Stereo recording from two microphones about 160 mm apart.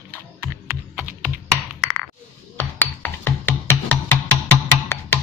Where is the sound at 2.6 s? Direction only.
10° left (ahead or behind).